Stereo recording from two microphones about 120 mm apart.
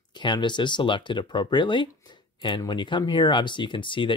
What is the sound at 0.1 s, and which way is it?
Speech, 40° left (ahead or behind).